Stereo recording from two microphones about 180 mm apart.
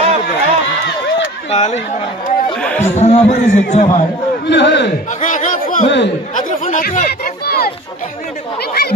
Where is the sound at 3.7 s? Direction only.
40° left (ahead or behind).